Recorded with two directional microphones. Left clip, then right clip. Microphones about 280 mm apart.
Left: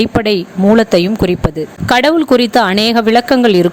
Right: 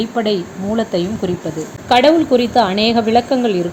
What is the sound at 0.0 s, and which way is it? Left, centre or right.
Speech, left.